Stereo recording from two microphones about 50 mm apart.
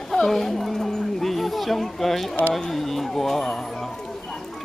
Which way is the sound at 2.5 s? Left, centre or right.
Centre.